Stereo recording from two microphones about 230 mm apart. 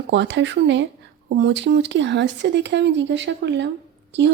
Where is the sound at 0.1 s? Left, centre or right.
Right.